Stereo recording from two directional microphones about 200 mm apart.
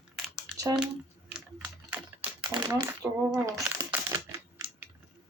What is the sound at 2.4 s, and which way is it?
Crumpling, 20° right (ahead or behind).